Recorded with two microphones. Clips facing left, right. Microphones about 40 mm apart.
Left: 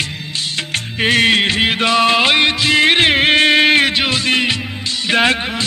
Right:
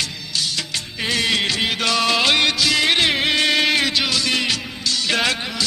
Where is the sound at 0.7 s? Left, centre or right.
Left.